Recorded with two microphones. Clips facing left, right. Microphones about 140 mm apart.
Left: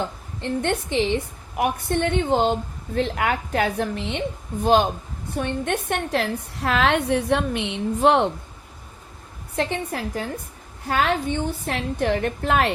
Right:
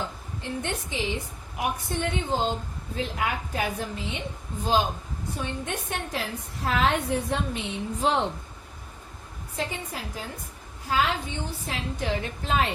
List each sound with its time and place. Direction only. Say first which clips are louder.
0.4 s a woman's voice: left 8 dB; 65° left (ahead or behind)
9.6 s a woman's voice: left 7 dB; 70° left (ahead or behind)